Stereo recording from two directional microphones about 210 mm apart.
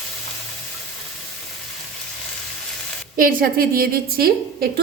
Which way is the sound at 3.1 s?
40° right (ahead or behind).